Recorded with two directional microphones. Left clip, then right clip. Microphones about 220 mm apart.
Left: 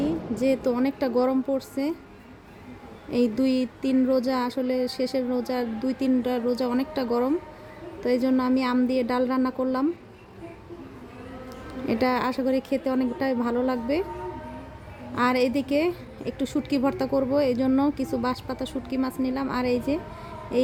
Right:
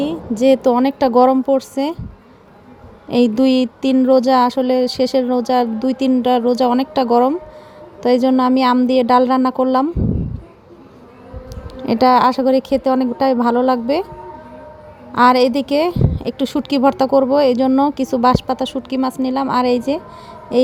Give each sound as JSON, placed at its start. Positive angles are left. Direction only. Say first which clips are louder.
{"t": 0.0, "sound": "a woman's voice", "louder": "right 9 dB", "side_deg": -35}
{"t": 3.1, "sound": "a woman's voice", "louder": "right 10 dB", "side_deg": -30}
{"t": 11.7, "sound": "a woman's voice", "louder": "right 12 dB", "side_deg": -30}
{"t": 15.1, "sound": "a woman's voice", "louder": "right 11 dB", "side_deg": -35}